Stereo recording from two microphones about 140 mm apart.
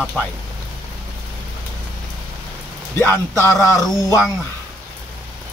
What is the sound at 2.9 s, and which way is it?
Speech, 15° left (ahead or behind).